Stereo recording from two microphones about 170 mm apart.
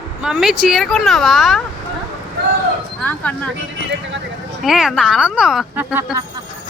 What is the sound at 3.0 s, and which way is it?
Speech, 10° left (ahead or behind).